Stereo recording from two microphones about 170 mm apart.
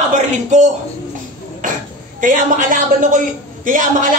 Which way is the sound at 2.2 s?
50° right (ahead or behind).